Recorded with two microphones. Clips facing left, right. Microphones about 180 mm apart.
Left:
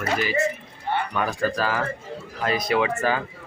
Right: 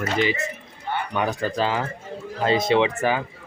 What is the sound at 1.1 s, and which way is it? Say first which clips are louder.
Speech: even; 20° right (ahead or behind).